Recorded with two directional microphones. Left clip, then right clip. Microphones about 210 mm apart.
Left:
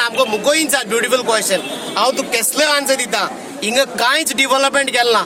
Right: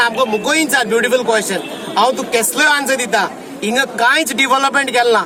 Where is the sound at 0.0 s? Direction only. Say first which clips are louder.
Right 1 dB; centre (ahead or behind).